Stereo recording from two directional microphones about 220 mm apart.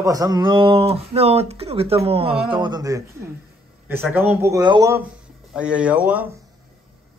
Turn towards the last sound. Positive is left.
turn(degrees=-5)  # may be behind; listen again after turning